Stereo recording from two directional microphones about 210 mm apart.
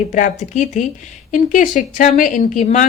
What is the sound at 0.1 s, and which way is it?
A woman's voice, 35° left (ahead or behind).